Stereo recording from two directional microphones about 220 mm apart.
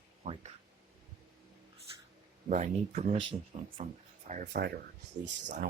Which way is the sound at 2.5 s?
35° right (ahead or behind).